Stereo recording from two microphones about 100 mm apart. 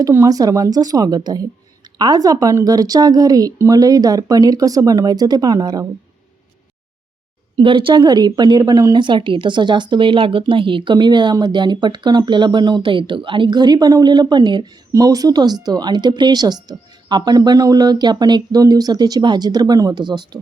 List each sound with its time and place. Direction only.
0.0 s speech: 35° right (ahead or behind)
7.5 s speech: 55° right (ahead or behind)
14.9 s speech: 40° right (ahead or behind)